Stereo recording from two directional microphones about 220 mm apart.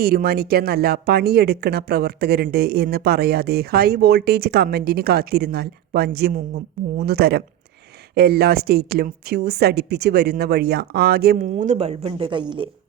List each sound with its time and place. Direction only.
0.0 s speech: 45° right (ahead or behind); by 12.7 s 20° right (ahead or behind)